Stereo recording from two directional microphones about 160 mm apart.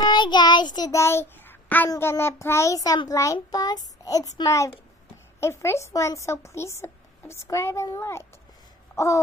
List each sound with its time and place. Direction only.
0.0 s child singing: 30° left (ahead or behind); by 1.9 s 10° left (ahead or behind)
1.9 s a child's voice: 15° left (ahead or behind)
8.9 s a sound: 20° left (ahead or behind)